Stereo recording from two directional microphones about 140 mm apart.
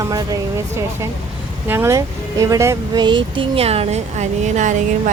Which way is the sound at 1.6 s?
15° right (ahead or behind).